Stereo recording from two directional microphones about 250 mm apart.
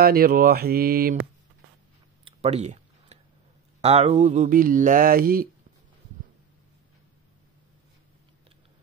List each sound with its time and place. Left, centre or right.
0.0 s speech: right
2.2 s a sound: right
3.8 s speech: right